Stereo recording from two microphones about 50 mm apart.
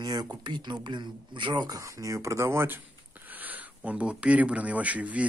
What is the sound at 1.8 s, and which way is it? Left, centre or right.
Speech, right.